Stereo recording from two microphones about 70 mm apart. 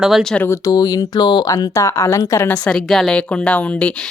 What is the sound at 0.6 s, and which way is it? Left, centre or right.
Speech, left.